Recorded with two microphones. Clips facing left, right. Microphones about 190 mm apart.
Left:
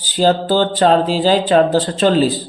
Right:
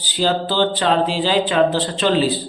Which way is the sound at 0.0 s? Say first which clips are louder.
Left 5 dB; 45° left (ahead or behind).